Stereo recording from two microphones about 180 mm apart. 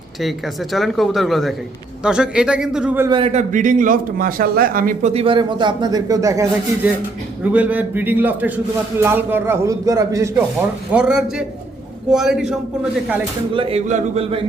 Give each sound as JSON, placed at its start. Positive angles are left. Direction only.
{"t": 0.2, "sound": "speech", "side_deg": 0}
{"t": 3.1, "sound": "a man's voice", "side_deg": -30}
{"t": 5.1, "sound": "a man's voice", "side_deg": -30}
{"t": 10.9, "sound": "speech", "side_deg": -5}
{"t": 13.5, "sound": "a man's voice", "side_deg": -30}